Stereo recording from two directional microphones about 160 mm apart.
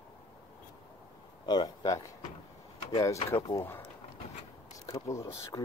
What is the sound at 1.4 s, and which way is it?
Speech, 25° left (ahead or behind).